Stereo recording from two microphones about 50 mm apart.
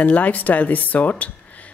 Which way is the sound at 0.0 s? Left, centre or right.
Left.